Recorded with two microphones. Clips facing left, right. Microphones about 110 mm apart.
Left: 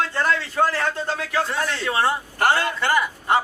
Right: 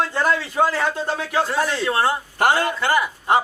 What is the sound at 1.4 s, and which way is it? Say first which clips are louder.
Speech: right 3 dB; 5° right (ahead or behind).